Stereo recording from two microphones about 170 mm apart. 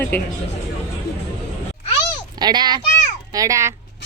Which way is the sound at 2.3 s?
25° right (ahead or behind).